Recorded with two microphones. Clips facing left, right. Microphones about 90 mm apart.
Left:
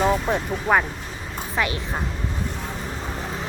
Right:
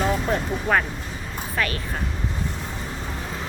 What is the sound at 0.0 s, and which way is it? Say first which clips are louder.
A woman's voice: left 2 dB; 15° left (ahead or behind).